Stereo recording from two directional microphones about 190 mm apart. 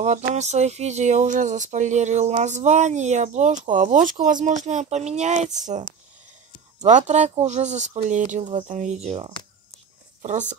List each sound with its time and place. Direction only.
0.3 s speech: 35° right (ahead or behind)